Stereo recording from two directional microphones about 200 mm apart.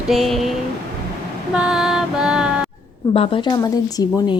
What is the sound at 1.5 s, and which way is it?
Music, 5° right (ahead or behind).